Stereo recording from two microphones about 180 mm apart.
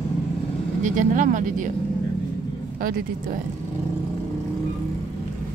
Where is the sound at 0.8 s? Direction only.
45° right (ahead or behind).